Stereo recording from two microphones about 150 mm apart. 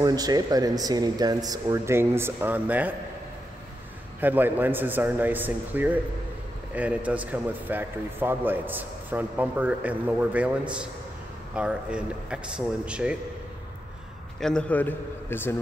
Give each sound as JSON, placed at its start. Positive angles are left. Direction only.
{"t": 0.0, "sound": "speech", "side_deg": -25}
{"t": 4.2, "sound": "speech", "side_deg": -10}
{"t": 14.4, "sound": "a man's voice", "side_deg": 5}